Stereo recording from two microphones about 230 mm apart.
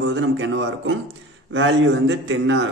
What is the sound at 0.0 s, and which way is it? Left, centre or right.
A man's voice, right.